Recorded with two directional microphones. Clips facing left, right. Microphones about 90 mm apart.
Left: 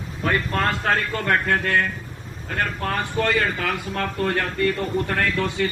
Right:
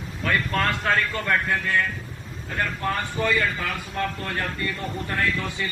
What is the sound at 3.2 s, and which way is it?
A man's voice, 60° left (ahead or behind).